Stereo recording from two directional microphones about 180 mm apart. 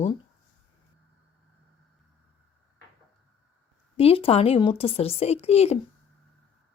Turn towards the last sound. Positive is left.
turn(degrees=35)  # may be behind; listen again after turning